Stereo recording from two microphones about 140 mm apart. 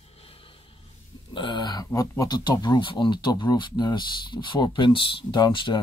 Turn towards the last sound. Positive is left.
turn(degrees=35)  # may be behind; listen again after turning